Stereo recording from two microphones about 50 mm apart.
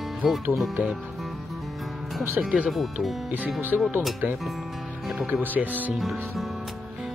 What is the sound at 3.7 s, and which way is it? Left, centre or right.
Speech, centre.